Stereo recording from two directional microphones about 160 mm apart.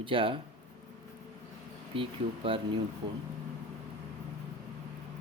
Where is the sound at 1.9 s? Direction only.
35° right (ahead or behind).